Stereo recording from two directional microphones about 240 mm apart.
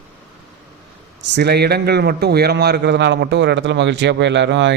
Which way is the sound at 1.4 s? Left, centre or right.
Right.